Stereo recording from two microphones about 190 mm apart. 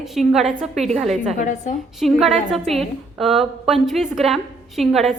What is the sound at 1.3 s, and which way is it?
Speech, 40° left (ahead or behind).